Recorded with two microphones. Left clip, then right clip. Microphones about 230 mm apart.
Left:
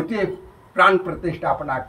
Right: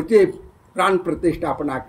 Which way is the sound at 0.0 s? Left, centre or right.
Right.